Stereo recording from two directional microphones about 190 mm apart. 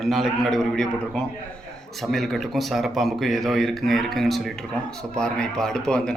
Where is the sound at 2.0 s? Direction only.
Centre (ahead or behind).